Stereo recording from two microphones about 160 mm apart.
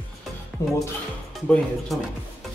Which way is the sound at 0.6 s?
15° left (ahead or behind).